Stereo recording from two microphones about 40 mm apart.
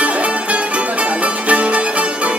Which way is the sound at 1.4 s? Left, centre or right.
Right.